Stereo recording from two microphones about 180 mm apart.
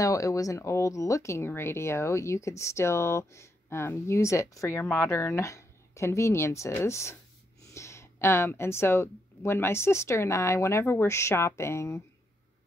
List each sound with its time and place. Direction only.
0.0 s speech: 20° left (ahead or behind)